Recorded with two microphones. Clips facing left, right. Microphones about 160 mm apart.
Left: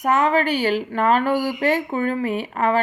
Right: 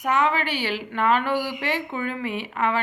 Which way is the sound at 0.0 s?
40° left (ahead or behind).